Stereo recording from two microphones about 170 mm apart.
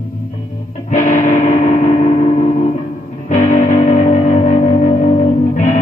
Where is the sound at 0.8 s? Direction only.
50° left (ahead or behind).